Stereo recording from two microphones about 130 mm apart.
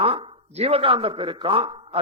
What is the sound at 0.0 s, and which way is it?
A man's voice, 45° right (ahead or behind).